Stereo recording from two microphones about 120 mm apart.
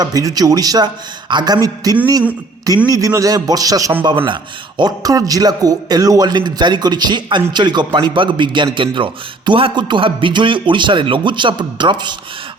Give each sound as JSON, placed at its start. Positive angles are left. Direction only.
{"t": 0.0, "sound": "a man's voice", "side_deg": -30}
{"t": 4.0, "sound": "a man's voice", "side_deg": -40}